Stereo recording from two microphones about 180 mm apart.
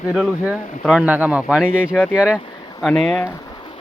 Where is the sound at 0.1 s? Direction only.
5° right (ahead or behind).